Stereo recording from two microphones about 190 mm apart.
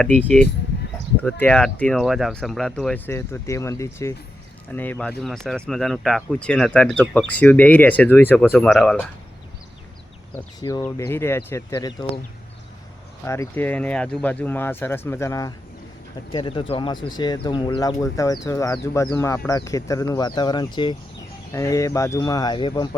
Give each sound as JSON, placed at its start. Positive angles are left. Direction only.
{"t": 0.0, "sound": "speech", "side_deg": 5}
{"t": 10.3, "sound": "speech", "side_deg": 20}
{"t": 13.2, "sound": "speech", "side_deg": 15}